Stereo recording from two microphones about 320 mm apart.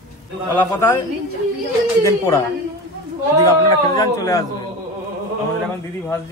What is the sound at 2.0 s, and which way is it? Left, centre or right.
Speech, centre.